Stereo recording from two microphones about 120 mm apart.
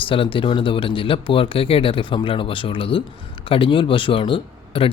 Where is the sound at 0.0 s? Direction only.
45° left (ahead or behind).